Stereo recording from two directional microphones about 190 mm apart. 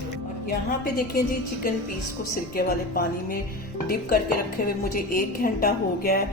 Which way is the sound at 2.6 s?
50° left (ahead or behind).